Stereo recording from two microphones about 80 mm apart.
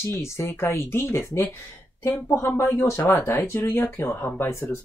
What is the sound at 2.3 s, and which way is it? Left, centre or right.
Speech, left.